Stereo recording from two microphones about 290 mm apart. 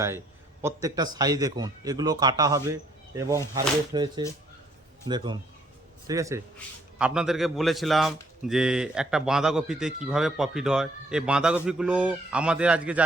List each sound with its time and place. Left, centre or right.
0.6 s a man's voice: centre